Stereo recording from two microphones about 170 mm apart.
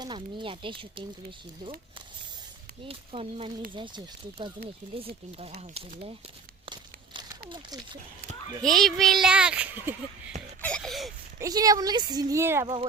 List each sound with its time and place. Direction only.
0.0 s speech: 25° right (ahead or behind)
2.8 s speech: 35° right (ahead or behind)
6.7 s a sound: 25° right (ahead or behind)
8.6 s a child's voice: centre (ahead or behind)
10.6 s a sound: 5° left (ahead or behind)
11.3 s speech: 20° right (ahead or behind)
12.6 s speech: 30° right (ahead or behind)